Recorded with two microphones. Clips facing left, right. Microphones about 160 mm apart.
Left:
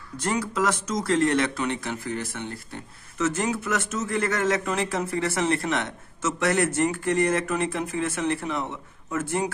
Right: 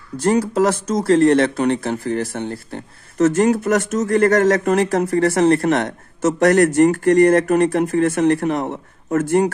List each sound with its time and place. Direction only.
0.2 s speech: 35° right (ahead or behind)
3.2 s speech: 55° right (ahead or behind)
5.9 s speech: 60° right (ahead or behind)